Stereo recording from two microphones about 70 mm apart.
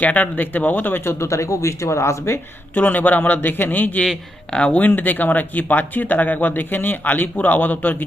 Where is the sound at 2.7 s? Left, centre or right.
Left.